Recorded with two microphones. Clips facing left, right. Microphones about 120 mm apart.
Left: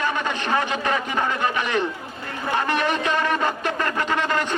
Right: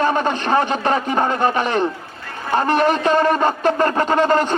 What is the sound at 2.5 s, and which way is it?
A man's voice, 35° right (ahead or behind).